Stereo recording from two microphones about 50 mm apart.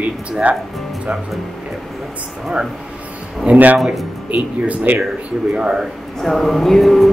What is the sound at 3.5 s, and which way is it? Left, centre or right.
Speech, right.